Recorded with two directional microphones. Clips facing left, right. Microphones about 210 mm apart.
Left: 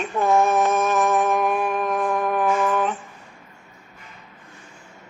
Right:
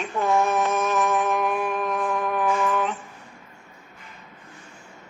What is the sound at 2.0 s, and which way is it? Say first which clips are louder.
Music: left 3 dB; 45° left (ahead or behind).